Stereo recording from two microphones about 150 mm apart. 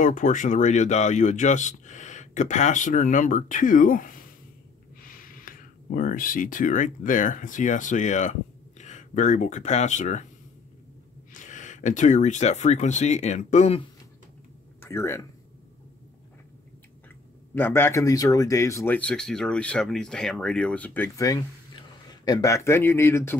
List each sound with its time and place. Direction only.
0.0 s speech: 55° left (ahead or behind)
11.3 s speech: 55° left (ahead or behind)
14.8 s speech: 15° left (ahead or behind)
17.6 s speech: 15° left (ahead or behind)
18.9 s speech: 5° left (ahead or behind)
21.3 s a man's voice: 30° left (ahead or behind)